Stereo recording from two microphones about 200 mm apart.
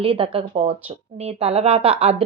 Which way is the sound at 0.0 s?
25° right (ahead or behind).